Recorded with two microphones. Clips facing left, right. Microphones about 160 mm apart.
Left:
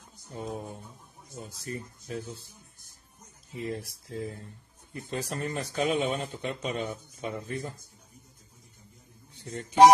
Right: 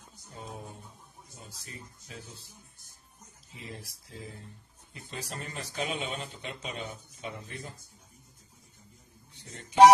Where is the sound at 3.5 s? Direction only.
50° left (ahead or behind).